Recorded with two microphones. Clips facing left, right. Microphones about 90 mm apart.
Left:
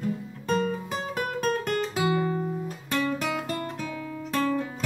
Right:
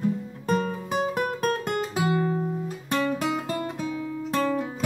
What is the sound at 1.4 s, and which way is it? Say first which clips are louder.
Guitar: even; 10° right (ahead or behind).